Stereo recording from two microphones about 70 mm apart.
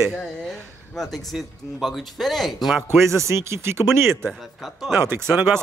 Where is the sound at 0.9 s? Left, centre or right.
Centre.